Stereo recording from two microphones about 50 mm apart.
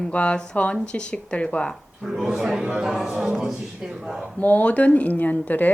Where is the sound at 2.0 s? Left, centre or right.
Centre.